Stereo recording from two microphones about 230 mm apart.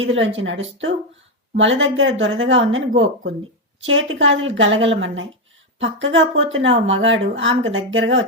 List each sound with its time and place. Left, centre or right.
0.0 s a woman's voice: right